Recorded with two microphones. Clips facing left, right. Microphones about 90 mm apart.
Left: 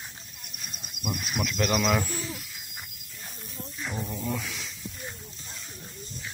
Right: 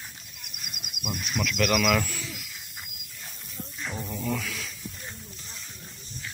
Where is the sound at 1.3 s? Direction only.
25° left (ahead or behind).